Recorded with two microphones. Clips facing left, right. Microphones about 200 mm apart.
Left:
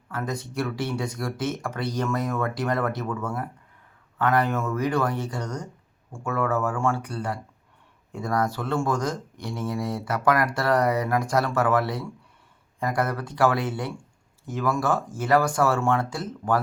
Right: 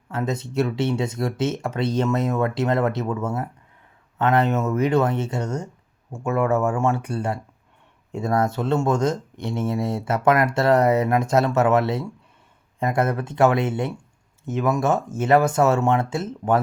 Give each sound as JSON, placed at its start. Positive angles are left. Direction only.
{"t": 0.1, "sound": "speech", "side_deg": -25}